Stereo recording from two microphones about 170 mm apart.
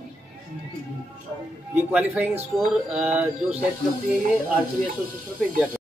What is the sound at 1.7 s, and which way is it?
Speech, 10° right (ahead or behind).